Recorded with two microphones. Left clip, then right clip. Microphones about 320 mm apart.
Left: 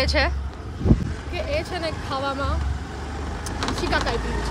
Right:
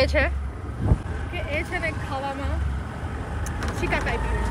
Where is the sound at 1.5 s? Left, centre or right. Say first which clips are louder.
Even; centre.